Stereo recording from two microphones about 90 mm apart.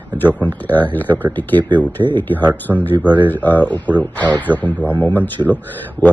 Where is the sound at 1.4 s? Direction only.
20° left (ahead or behind).